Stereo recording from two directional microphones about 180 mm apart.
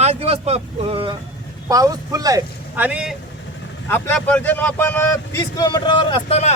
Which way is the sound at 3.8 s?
10° left (ahead or behind).